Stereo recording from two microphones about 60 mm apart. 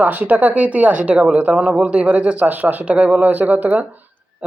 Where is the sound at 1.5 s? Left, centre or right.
Centre.